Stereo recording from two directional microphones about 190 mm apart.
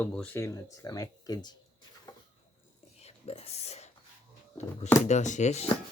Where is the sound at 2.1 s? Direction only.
20° left (ahead or behind).